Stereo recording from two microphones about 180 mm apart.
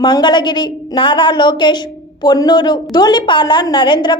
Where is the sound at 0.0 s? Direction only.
25° left (ahead or behind).